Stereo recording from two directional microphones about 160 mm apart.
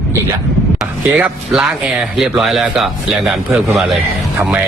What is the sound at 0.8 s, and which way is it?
A man's voice, centre (ahead or behind).